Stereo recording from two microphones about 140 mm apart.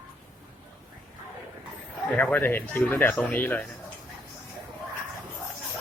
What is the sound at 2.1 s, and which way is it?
Speech, 10° left (ahead or behind).